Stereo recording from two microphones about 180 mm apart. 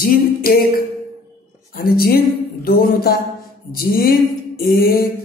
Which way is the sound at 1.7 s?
55° left (ahead or behind).